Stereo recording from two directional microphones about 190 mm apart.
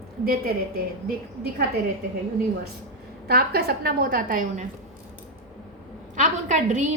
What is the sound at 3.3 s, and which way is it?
A woman's voice, 55° right (ahead or behind).